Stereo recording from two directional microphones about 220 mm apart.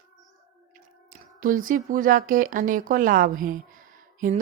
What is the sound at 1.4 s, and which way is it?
A woman's voice, 40° right (ahead or behind).